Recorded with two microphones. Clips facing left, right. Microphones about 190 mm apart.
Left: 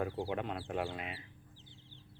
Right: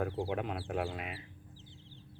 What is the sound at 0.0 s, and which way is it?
Speech, centre (ahead or behind).